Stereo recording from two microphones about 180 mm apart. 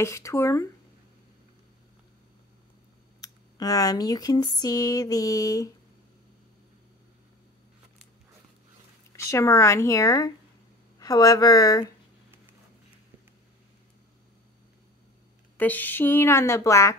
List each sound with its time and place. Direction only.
0.0 s a woman's voice: 15° left (ahead or behind)
3.2 s speech: 20° left (ahead or behind)
9.1 s a woman's voice: 15° left (ahead or behind)
15.5 s a woman's voice: 10° left (ahead or behind)